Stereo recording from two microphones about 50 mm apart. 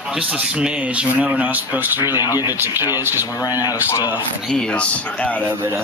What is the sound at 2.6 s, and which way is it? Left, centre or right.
Speech, right.